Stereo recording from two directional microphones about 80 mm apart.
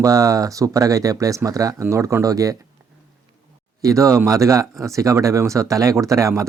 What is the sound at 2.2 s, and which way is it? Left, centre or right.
Speech, right.